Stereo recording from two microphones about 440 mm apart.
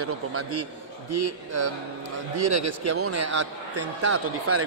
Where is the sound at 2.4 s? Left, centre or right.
Right.